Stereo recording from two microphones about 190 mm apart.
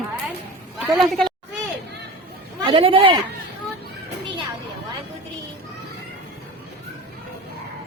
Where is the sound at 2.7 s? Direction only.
30° right (ahead or behind).